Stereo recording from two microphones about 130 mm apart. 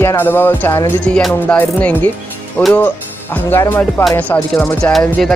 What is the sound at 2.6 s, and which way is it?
Speech, 10° left (ahead or behind).